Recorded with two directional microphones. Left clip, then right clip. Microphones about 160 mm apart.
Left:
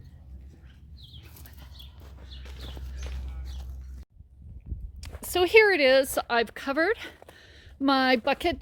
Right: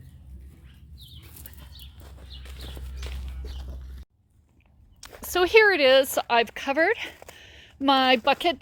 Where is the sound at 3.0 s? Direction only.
45° right (ahead or behind).